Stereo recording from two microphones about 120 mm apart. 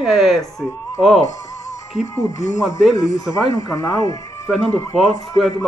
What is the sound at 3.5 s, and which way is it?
Speech, 30° left (ahead or behind).